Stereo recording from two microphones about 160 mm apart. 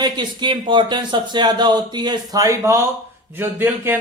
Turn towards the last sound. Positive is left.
turn(degrees=-15)  # may be behind; listen again after turning